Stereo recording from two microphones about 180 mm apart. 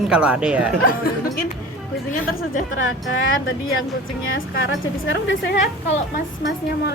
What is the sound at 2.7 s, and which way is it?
Speech, 90° left.